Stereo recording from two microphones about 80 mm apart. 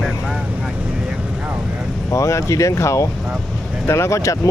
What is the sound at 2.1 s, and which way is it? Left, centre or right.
Speech, left.